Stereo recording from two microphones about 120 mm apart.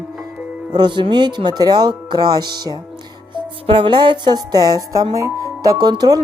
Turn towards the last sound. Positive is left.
turn(degrees=-35)  # may be behind; listen again after turning